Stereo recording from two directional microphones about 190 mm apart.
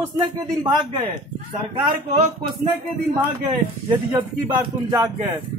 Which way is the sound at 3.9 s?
10° right (ahead or behind).